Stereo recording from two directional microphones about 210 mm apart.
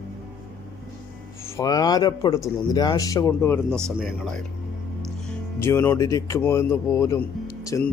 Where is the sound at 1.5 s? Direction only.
20° left (ahead or behind).